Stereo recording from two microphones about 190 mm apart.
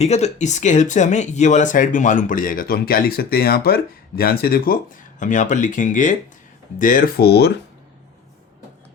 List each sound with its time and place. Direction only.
0.0 s speech: 35° left (ahead or behind); by 7.5 s 60° left (ahead or behind)